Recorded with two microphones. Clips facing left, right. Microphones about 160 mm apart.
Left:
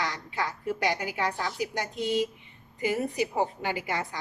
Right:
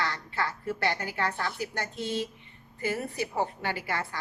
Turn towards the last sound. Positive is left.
turn(degrees=20)  # may be behind; listen again after turning